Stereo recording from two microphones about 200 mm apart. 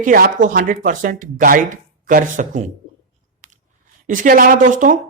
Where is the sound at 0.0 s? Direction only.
40° right (ahead or behind).